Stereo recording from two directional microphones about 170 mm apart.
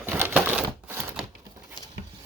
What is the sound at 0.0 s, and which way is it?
Typewriter, 10° right (ahead or behind).